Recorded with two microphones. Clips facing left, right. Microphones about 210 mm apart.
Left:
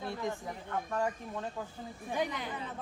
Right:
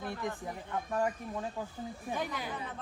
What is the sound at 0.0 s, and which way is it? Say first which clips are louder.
Speech: left 1 dB; 25° left (ahead or behind).